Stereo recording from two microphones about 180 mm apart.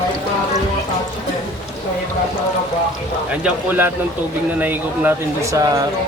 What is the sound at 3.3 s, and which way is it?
Speech, 10° right (ahead or behind).